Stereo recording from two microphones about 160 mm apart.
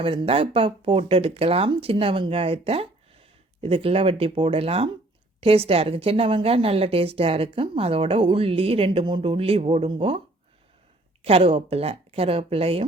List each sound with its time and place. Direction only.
0.0 s speech: 35° right (ahead or behind)
11.2 s speech: 40° right (ahead or behind)